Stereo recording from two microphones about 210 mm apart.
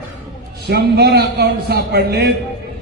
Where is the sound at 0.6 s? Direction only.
50° right (ahead or behind).